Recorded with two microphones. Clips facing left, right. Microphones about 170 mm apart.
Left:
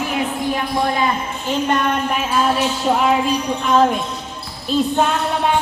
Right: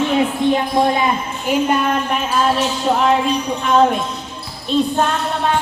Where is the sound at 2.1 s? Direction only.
5° left (ahead or behind).